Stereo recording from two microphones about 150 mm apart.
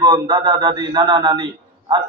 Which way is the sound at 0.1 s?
35° right (ahead or behind).